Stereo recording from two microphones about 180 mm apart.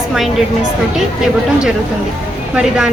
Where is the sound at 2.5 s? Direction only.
5° right (ahead or behind).